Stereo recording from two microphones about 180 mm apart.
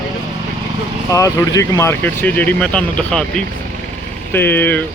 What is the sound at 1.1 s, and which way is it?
Speech, 15° left (ahead or behind).